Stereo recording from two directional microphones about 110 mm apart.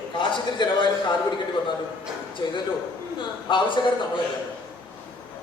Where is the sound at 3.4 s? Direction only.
45° left (ahead or behind).